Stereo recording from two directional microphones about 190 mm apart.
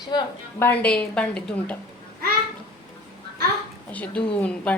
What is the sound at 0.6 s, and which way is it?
A woman's voice, 10° left (ahead or behind).